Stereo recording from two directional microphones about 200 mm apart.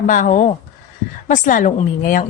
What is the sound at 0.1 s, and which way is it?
A woman's voice, 40° left (ahead or behind).